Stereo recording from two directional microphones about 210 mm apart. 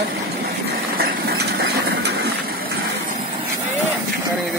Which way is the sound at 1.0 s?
45° right (ahead or behind).